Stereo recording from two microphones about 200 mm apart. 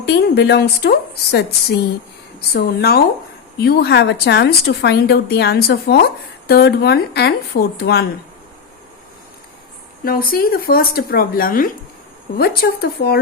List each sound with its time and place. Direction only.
0.0 s a woman's voice: 55° left (ahead or behind)
10.0 s speech: 45° left (ahead or behind)